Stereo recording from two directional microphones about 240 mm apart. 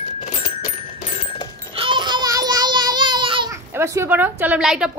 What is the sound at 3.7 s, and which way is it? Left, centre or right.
Speech, centre.